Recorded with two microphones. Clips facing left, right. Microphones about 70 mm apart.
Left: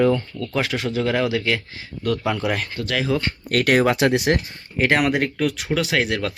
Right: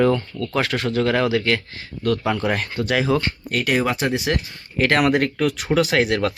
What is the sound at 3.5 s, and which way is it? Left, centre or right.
Speech, left.